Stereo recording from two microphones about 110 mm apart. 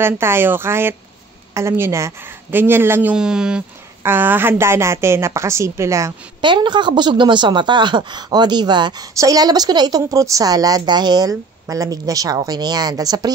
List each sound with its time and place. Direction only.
0.0 s speech: 20° right (ahead or behind)
4.0 s speech: 20° right (ahead or behind)
6.4 s speech: 45° right (ahead or behind)
9.1 s a woman's voice: 30° right (ahead or behind)